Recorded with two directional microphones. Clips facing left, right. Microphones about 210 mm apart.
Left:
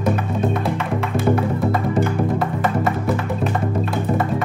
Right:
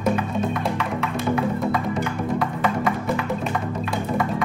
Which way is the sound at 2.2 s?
25° left (ahead or behind).